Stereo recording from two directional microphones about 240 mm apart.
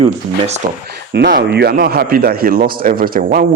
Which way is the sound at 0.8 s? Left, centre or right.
Right.